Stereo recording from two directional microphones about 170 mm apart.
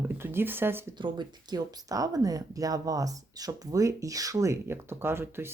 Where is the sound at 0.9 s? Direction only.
25° right (ahead or behind).